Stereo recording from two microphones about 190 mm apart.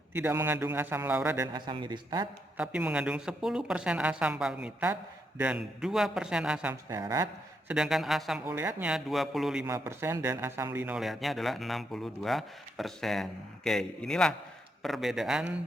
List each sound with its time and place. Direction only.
0.1 s a man's voice: 10° right (ahead or behind)
1.5 s a man's voice: 25° right (ahead or behind)
2.6 s a man's voice: 5° right (ahead or behind)
7.7 s a man's voice: 5° right (ahead or behind)
9.6 s a man's voice: 15° right (ahead or behind)